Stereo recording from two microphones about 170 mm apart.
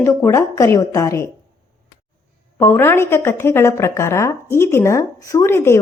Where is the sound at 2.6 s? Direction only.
15° left (ahead or behind).